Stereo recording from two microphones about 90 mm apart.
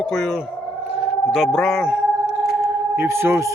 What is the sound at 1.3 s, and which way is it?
Speech, centre (ahead or behind).